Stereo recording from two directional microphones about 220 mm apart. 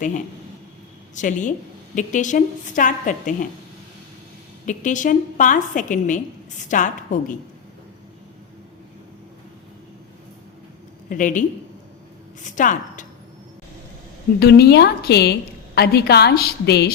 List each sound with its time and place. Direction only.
1.1 s a woman's voice: 35° left (ahead or behind)
4.6 s a woman's voice: 35° left (ahead or behind)
11.1 s a woman's voice: 35° left (ahead or behind)
14.3 s a woman's voice: 45° left (ahead or behind)